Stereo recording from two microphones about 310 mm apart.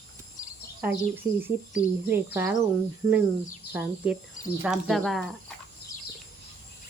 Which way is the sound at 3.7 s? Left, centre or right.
Centre.